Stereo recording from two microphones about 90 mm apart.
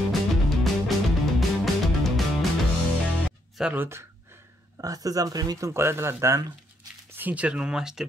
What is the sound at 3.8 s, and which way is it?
Speech, 30° right (ahead or behind).